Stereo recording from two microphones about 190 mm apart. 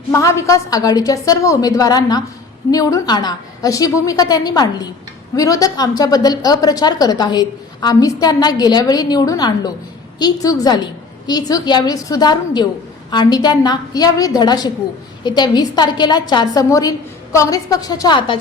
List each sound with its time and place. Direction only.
0.1 s a woman's voice: 15° left (ahead or behind)